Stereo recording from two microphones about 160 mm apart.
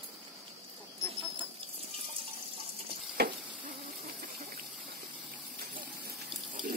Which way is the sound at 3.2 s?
80° right.